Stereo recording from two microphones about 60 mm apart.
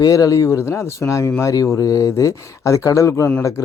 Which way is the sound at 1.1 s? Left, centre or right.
Left.